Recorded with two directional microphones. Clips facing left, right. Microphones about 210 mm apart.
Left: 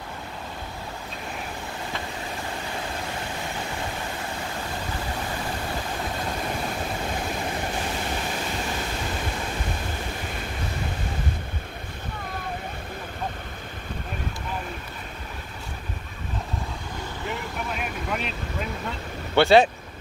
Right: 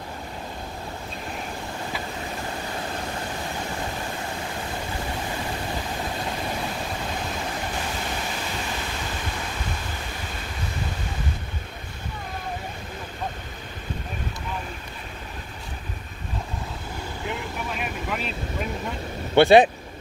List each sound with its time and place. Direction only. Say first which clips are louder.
17.7 s vehicle: even; centre (ahead or behind)
19.3 s speech: right 2 dB; 20° right (ahead or behind)